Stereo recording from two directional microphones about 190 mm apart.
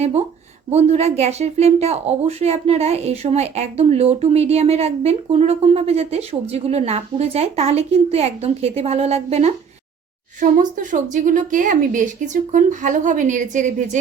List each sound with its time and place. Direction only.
0.0 s speech: 35° right (ahead or behind)
10.4 s speech: 45° right (ahead or behind)